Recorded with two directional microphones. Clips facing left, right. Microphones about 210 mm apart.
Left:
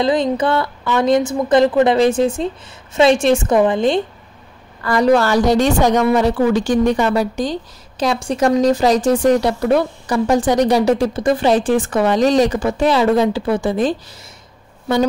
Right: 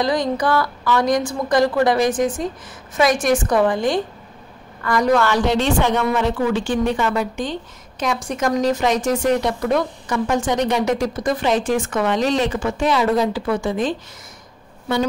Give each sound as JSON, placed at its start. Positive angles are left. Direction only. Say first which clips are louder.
{"t": 0.0, "sound": "a woman's voice", "louder": "left 3 dB", "side_deg": 25}